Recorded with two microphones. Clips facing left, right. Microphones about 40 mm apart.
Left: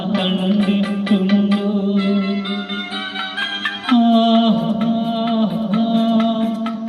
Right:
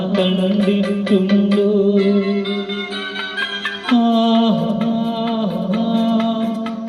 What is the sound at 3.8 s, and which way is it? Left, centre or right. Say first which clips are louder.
Music: left 1 dB; left.